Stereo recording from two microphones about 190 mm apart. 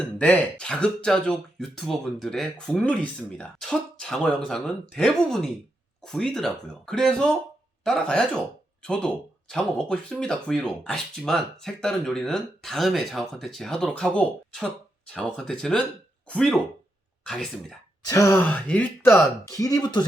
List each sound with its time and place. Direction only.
0.6 s speech: 5° left (ahead or behind)
18.0 s speech: 15° left (ahead or behind)